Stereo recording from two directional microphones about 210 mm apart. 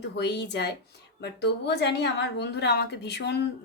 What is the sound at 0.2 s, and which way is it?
Speech, 55° left (ahead or behind).